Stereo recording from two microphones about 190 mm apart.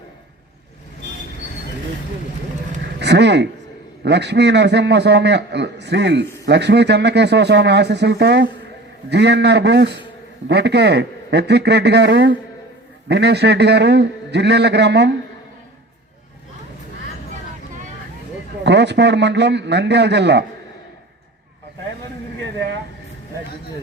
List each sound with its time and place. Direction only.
3.0 s a man's voice: 65° right (ahead or behind)
18.6 s a man's voice: 65° right (ahead or behind)